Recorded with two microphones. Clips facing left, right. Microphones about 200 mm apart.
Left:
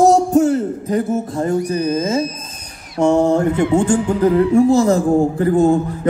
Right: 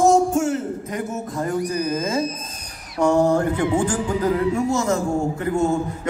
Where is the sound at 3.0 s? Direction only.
25° left (ahead or behind).